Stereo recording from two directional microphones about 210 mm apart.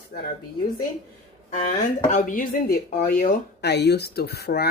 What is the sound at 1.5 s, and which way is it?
Speech, 40° left (ahead or behind).